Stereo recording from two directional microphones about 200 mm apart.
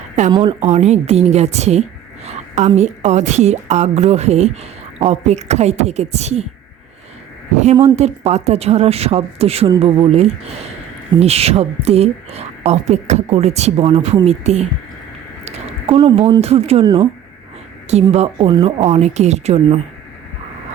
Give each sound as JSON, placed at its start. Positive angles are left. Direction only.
{"t": 0.3, "sound": "speech", "side_deg": -20}
{"t": 0.7, "sound": "speech", "side_deg": -35}
{"t": 7.5, "sound": "speech", "side_deg": -35}
{"t": 15.4, "sound": "a sound", "side_deg": -30}
{"t": 16.0, "sound": "speech", "side_deg": -30}
{"t": 18.1, "sound": "speech", "side_deg": -30}